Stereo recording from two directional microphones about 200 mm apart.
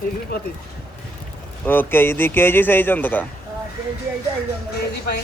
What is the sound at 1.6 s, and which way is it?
Speech, 10° left (ahead or behind).